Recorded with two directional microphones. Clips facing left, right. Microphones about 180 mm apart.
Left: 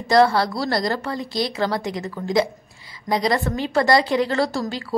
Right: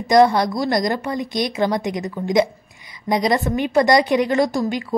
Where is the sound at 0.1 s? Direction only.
20° right (ahead or behind).